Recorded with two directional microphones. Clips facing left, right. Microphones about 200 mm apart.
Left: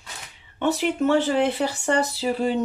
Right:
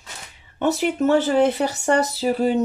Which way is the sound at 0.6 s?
45° right (ahead or behind).